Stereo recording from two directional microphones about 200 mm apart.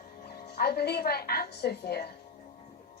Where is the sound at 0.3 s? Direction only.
50° left (ahead or behind).